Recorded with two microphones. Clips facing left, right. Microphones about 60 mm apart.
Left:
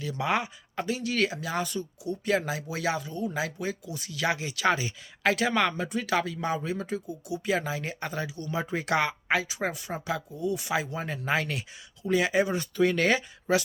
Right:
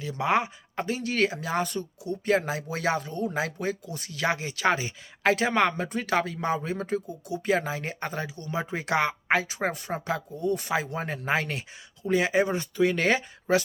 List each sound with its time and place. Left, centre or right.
0.0 s speech: right
9.3 s speech: right
12.7 s speech: centre
13.1 s speech: right